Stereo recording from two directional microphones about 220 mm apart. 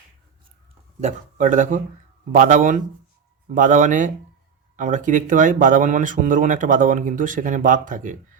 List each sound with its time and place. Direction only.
1.0 s speech: 35° right (ahead or behind)